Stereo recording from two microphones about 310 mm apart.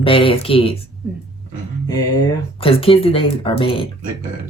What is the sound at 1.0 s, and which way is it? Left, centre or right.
Speech, centre.